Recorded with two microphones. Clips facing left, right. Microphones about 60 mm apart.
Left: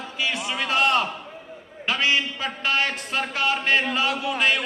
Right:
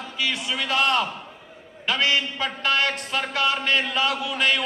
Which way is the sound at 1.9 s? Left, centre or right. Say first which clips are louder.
Even; right.